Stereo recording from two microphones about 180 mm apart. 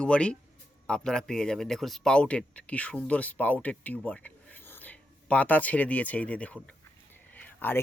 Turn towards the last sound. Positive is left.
turn(degrees=10)  # may be behind; listen again after turning